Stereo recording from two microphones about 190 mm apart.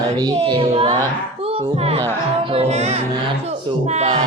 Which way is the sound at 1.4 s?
30° right (ahead or behind).